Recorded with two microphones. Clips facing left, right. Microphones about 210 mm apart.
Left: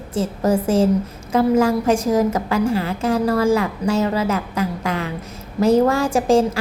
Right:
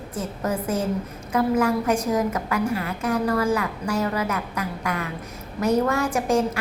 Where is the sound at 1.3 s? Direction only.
25° left (ahead or behind).